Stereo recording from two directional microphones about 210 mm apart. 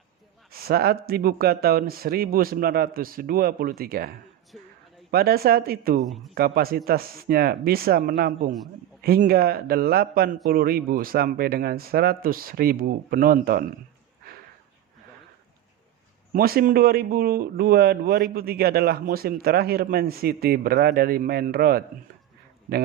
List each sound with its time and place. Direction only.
0.5 s speech: 45° right (ahead or behind)
4.5 s a sound: centre (ahead or behind)
5.1 s speech: 45° right (ahead or behind)
16.3 s speech: 45° right (ahead or behind)